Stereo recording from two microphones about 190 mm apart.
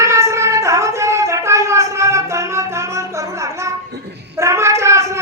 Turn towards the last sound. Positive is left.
turn(degrees=-15)  # may be behind; listen again after turning